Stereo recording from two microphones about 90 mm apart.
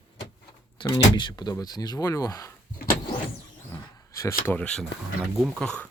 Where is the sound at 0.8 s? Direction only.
65° left (ahead or behind).